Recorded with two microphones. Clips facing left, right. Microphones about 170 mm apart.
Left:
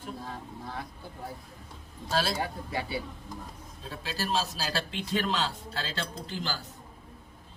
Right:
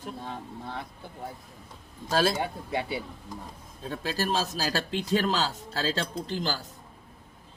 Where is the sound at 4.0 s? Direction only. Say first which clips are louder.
Right 2 dB; 45° right (ahead or behind).